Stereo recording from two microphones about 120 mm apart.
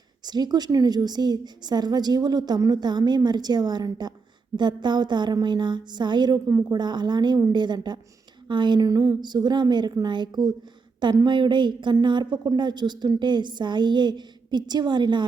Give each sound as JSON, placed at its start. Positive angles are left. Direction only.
{"t": 0.2, "sound": "a woman's voice", "side_deg": -35}